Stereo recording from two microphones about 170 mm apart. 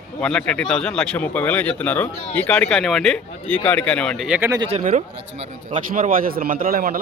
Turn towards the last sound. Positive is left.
turn(degrees=-60)  # may be behind; listen again after turning